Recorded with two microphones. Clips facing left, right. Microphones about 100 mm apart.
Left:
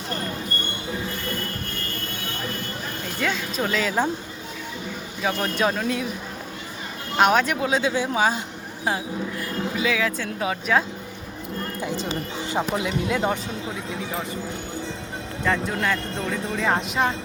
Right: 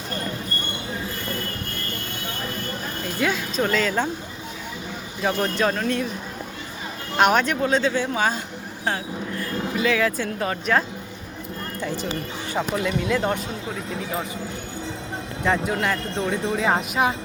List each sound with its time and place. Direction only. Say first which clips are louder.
3.2 s speech: right 3 dB; 5° right (ahead or behind)
5.2 s speech: right 1 dB; centre (ahead or behind)
7.2 s speech: even; centre (ahead or behind)
9.7 s speech: right 3 dB; centre (ahead or behind)
11.8 s speech: right 1 dB; 15° left (ahead or behind)
13.1 s speech: even; centre (ahead or behind)
15.4 s speech: right 1 dB; 5° right (ahead or behind)